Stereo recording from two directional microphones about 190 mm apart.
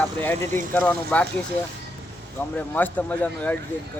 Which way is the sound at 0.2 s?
10° left (ahead or behind).